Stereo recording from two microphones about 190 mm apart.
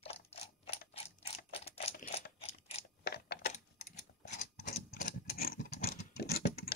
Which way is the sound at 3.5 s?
40° left (ahead or behind).